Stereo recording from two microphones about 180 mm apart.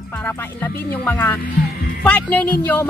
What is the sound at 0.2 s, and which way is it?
Speech, 10° left (ahead or behind).